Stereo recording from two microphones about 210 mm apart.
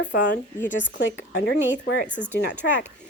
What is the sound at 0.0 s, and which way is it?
Speech, 55° left (ahead or behind).